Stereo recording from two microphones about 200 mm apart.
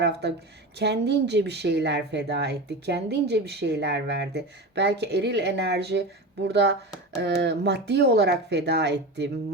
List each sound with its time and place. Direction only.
0.0 s speech: 60° right (ahead or behind)